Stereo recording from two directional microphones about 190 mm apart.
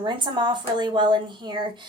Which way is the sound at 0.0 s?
25° right (ahead or behind).